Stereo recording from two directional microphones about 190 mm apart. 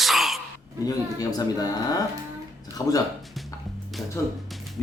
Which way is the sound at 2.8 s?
20° left (ahead or behind).